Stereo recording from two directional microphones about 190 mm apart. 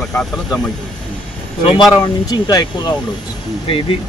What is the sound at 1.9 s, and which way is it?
Speech, 20° left (ahead or behind).